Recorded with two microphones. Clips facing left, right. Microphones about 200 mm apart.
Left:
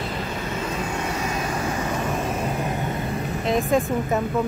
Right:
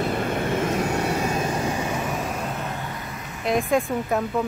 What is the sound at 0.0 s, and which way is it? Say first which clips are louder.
Vehicle: right 5 dB; 55° right (ahead or behind).